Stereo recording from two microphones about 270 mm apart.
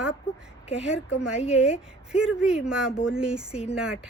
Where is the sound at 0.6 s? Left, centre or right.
Left.